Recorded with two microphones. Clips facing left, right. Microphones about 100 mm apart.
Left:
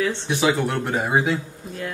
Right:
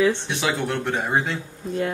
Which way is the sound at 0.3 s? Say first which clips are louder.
Left 4 dB; 5° left (ahead or behind).